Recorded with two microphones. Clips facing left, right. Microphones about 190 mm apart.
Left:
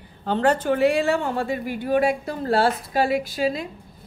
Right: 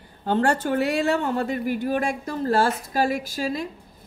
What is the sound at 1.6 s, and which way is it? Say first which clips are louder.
A woman's voice: left 3 dB; 45° right (ahead or behind).